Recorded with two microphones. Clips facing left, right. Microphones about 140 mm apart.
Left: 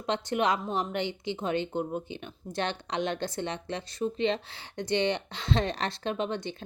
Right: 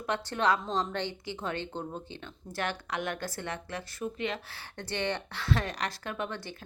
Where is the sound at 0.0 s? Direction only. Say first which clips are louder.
Left 2 dB; 20° left (ahead or behind).